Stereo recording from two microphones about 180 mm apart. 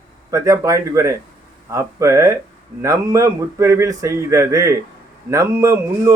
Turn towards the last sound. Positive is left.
turn(degrees=-15)  # may be behind; listen again after turning